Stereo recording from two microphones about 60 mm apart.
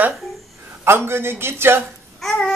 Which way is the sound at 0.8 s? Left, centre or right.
Right.